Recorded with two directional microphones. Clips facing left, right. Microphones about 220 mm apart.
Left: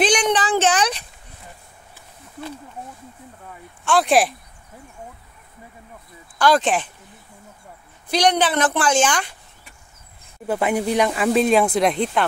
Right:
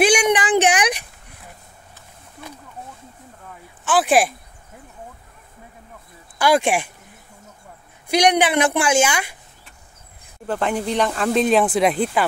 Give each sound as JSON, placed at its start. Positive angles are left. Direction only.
{"t": 0.0, "sound": "child singing", "side_deg": -10}
{"t": 3.8, "sound": "speech", "side_deg": 0}
{"t": 6.3, "sound": "a woman's voice", "side_deg": -10}
{"t": 8.1, "sound": "a woman's voice", "side_deg": -10}
{"t": 10.4, "sound": "speech", "side_deg": 10}